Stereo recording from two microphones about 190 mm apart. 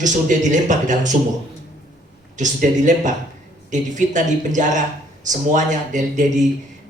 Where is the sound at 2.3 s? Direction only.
40° right (ahead or behind).